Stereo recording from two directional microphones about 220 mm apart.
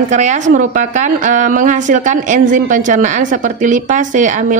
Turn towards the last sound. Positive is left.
turn(degrees=-35)  # may be behind; listen again after turning